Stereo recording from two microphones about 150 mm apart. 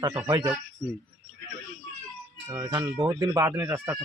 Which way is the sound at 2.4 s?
25° right (ahead or behind).